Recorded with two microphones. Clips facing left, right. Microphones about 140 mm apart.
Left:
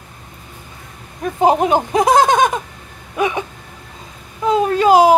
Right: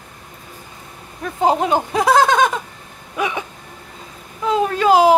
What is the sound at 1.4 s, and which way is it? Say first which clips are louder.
Speech: left 3 dB; 15° left (ahead or behind).